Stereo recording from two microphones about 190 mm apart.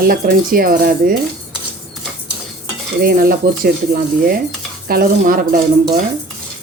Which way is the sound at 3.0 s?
50° right (ahead or behind).